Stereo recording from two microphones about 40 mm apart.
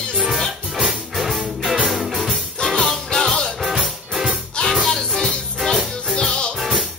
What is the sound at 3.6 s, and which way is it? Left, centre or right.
Music, centre.